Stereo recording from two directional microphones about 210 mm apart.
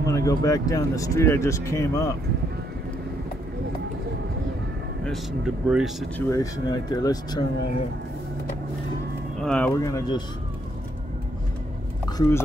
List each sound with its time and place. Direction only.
0.0 s speech: 15° left (ahead or behind)
5.0 s speech: centre (ahead or behind)
6.1 s speech: 10° left (ahead or behind)
9.4 s speech: 5° left (ahead or behind)
9.8 s speech: 15° left (ahead or behind)
12.1 s a sound: 15° left (ahead or behind)